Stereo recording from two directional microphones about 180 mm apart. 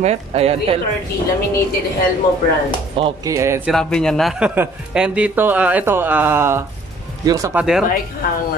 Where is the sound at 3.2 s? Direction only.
15° right (ahead or behind).